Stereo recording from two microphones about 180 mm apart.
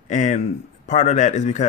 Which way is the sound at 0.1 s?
45° left (ahead or behind).